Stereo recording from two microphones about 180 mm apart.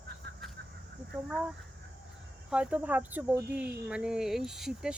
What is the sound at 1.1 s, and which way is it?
Speech, 5° right (ahead or behind).